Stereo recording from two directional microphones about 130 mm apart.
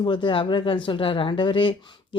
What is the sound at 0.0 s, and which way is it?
Speech, 40° left (ahead or behind).